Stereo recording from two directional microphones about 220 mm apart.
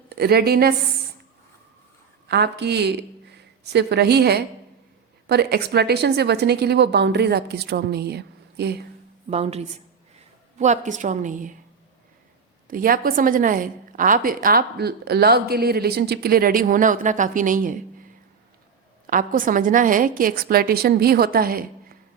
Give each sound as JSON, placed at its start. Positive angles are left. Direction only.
{"t": 0.1, "sound": "a woman's voice", "side_deg": -45}
{"t": 2.2, "sound": "a woman's voice", "side_deg": -50}
{"t": 9.3, "sound": "a woman's voice", "side_deg": -30}
{"t": 12.6, "sound": "a woman's voice", "side_deg": -40}
{"t": 19.0, "sound": "a woman's voice", "side_deg": -40}